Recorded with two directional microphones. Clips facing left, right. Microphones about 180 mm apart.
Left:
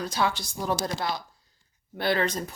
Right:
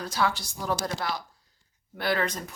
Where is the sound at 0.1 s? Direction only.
20° left (ahead or behind).